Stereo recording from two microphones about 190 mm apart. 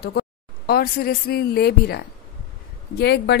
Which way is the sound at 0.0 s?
60° left (ahead or behind).